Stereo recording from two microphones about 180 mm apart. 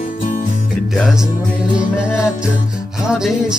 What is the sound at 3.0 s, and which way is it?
Music, 5° right (ahead or behind).